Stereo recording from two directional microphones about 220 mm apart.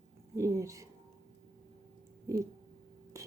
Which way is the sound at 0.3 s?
15° right (ahead or behind).